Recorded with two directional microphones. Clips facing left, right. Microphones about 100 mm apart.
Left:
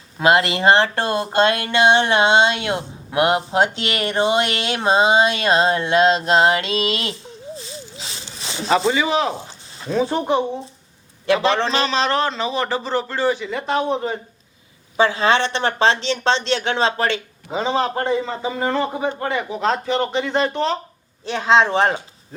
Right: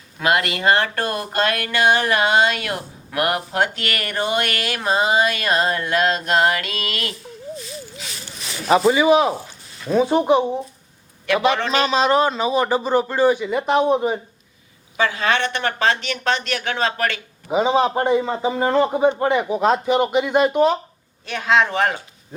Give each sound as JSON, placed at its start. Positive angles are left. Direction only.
{"t": 0.2, "sound": "speech", "side_deg": 25}
{"t": 8.9, "sound": "a man's voice", "side_deg": -15}
{"t": 9.5, "sound": "a sound", "side_deg": 30}
{"t": 9.9, "sound": "a man's voice", "side_deg": -15}
{"t": 11.5, "sound": "speech", "side_deg": 30}
{"t": 11.9, "sound": "a man's voice", "side_deg": -10}
{"t": 14.9, "sound": "speech", "side_deg": 30}
{"t": 17.5, "sound": "a man's voice", "side_deg": -15}
{"t": 21.2, "sound": "speech", "side_deg": 30}